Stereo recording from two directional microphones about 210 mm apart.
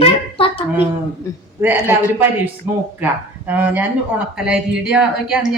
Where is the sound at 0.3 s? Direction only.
25° left (ahead or behind).